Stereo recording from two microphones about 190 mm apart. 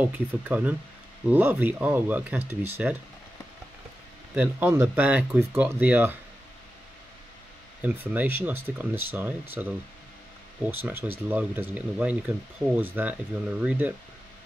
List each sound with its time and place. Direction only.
0.0 s speech: 10° right (ahead or behind)
4.4 s speech: 10° right (ahead or behind)
7.8 s speech: 10° right (ahead or behind)